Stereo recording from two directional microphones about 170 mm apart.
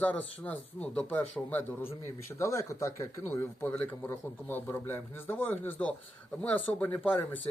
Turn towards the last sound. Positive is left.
turn(degrees=10)  # may be behind; listen again after turning